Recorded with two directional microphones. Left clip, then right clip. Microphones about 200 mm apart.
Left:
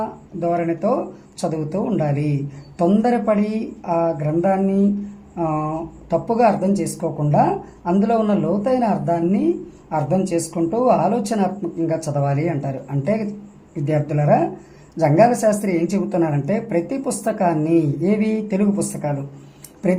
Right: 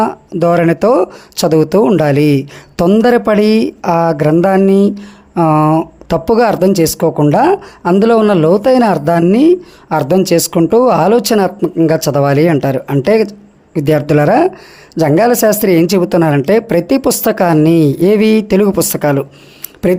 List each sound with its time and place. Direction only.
0.0 s speech: 50° right (ahead or behind)